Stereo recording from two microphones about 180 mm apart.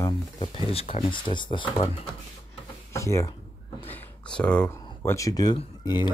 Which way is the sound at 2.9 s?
15° left (ahead or behind).